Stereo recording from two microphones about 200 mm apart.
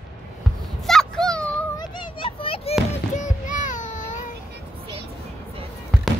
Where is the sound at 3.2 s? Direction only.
40° left (ahead or behind).